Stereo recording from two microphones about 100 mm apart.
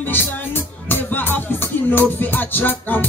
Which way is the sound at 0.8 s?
20° left (ahead or behind).